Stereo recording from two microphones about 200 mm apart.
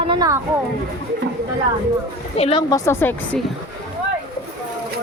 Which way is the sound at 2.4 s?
30° left (ahead or behind).